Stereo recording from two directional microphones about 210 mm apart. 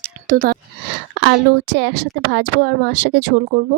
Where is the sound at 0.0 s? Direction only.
45° right (ahead or behind).